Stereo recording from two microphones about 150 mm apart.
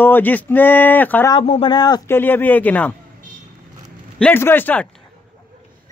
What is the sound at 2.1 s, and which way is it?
Speech, 15° left (ahead or behind).